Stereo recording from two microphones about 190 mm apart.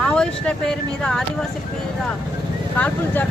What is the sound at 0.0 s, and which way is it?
Speech, 5° left (ahead or behind).